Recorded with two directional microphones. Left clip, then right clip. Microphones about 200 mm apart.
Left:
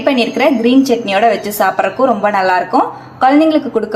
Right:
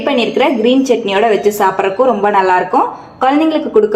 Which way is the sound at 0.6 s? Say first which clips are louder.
Right 1 dB; 25° left (ahead or behind).